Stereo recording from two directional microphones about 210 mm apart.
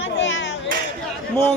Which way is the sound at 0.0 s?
60° left (ahead or behind).